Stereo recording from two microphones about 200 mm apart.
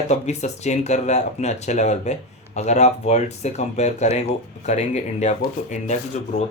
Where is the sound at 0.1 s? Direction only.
35° left (ahead or behind).